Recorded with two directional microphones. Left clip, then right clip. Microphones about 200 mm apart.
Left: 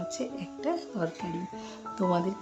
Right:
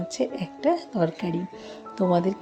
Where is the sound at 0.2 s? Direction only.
25° right (ahead or behind).